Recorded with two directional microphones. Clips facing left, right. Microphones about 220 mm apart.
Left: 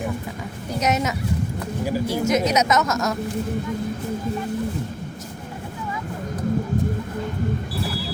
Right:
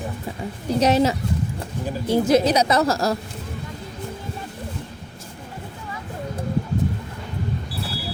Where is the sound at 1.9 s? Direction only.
10° left (ahead or behind).